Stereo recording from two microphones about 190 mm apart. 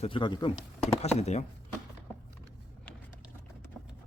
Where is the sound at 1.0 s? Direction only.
35° left (ahead or behind).